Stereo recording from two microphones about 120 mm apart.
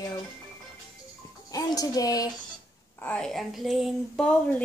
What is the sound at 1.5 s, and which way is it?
Speech, 30° left (ahead or behind).